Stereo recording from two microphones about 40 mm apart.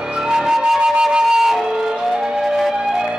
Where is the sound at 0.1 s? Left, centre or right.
Right.